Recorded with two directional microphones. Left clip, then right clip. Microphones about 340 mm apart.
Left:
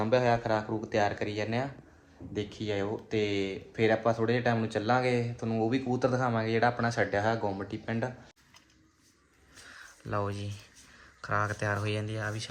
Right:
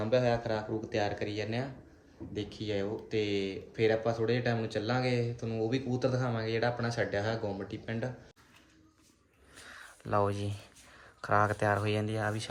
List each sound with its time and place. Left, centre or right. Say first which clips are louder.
0.0 s speech: left 3 dB; centre
9.6 s a sound: right 2 dB; centre
10.5 s speech: even; centre